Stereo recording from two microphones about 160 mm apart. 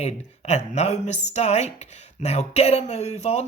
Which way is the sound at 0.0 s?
45° left (ahead or behind).